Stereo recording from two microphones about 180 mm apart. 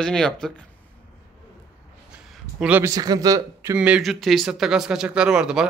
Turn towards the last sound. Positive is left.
turn(degrees=-5)  # may be behind; listen again after turning